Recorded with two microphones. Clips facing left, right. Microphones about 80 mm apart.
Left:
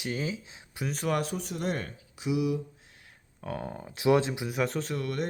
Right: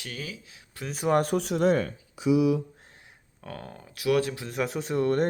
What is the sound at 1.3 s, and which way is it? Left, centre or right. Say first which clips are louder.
Speech: right 9 dB; right.